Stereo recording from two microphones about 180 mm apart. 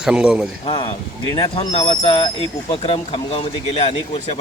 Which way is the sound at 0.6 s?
25° left (ahead or behind).